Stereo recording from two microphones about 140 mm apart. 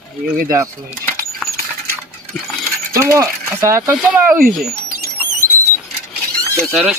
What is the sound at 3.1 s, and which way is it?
Speech, 20° right (ahead or behind).